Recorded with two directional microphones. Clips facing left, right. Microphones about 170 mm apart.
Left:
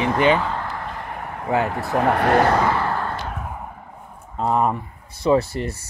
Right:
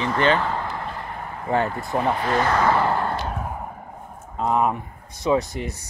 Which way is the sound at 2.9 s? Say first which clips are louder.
Right 2 dB; 30° right (ahead or behind).